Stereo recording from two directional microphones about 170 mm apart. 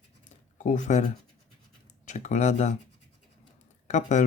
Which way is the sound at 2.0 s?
45° left (ahead or behind).